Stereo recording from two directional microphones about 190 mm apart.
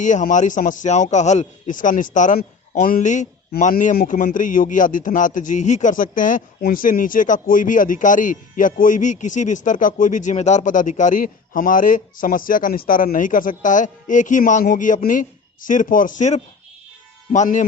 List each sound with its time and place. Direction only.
0.0 s a man's voice: 40° left (ahead or behind)